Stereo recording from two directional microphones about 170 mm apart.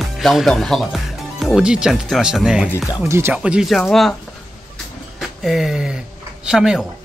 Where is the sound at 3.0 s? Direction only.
15° right (ahead or behind); by 4.1 s centre (ahead or behind).